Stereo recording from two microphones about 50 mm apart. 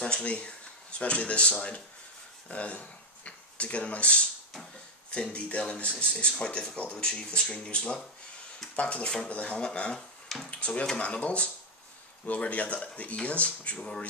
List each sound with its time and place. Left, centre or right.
0.0 s speech: left